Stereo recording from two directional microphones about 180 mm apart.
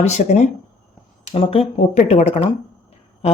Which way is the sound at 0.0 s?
40° left (ahead or behind).